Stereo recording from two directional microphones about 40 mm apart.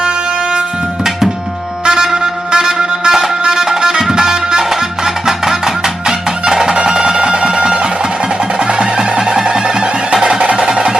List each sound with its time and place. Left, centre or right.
1.8 s music: centre